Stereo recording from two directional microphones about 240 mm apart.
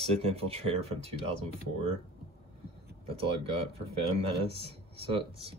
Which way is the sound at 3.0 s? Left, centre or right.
Right.